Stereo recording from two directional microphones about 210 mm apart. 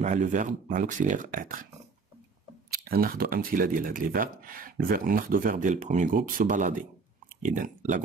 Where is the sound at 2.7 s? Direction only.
45° right (ahead or behind).